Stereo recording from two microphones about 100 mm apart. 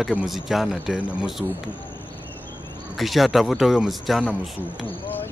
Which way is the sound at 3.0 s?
Centre (ahead or behind).